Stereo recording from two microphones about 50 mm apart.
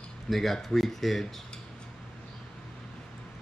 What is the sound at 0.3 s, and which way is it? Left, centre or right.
Speech, centre.